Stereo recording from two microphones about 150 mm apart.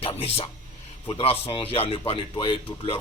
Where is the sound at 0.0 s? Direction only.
40° left (ahead or behind).